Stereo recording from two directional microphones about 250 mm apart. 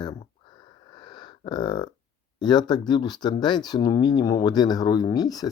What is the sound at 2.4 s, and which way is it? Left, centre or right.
Speech, centre.